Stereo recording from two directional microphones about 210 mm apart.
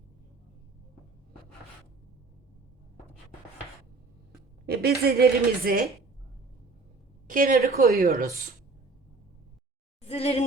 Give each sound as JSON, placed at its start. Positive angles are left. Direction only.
{"t": 4.6, "sound": "a woman's voice", "side_deg": -50}
{"t": 7.3, "sound": "a woman's voice", "side_deg": -40}
{"t": 10.1, "sound": "speech", "side_deg": 30}